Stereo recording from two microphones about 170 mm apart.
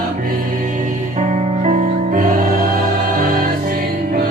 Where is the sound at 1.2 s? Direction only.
45° right (ahead or behind).